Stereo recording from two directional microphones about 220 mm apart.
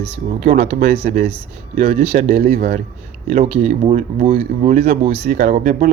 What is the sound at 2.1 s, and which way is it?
Speech, 35° right (ahead or behind).